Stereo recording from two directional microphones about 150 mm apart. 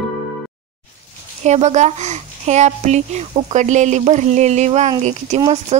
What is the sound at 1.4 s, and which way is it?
Speech, 50° right (ahead or behind).